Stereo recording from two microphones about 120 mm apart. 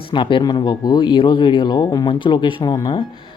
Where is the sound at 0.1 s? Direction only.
45° left (ahead or behind).